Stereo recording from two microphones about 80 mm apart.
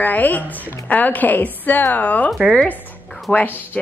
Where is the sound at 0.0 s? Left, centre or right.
Left.